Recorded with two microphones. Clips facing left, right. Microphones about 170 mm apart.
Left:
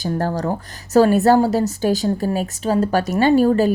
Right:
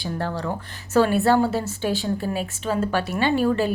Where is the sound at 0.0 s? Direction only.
40° left (ahead or behind).